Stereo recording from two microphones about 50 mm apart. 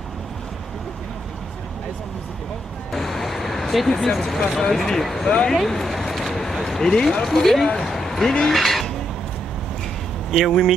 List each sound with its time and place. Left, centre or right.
2.9 s speech: centre
5.5 s a sound: centre
6.9 s speech: centre
10.3 s speech: centre